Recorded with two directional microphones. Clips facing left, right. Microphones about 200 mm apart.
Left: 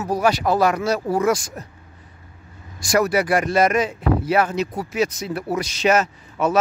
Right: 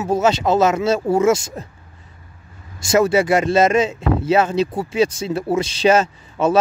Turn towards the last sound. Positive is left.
turn(degrees=-30)  # may be behind; listen again after turning